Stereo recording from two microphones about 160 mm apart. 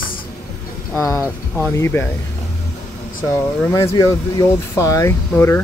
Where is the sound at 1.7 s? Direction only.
15° left (ahead or behind).